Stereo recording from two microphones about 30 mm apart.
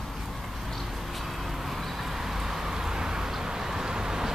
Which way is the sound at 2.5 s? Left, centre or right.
Centre.